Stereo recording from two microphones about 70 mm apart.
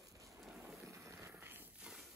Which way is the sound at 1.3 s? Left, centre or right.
Right.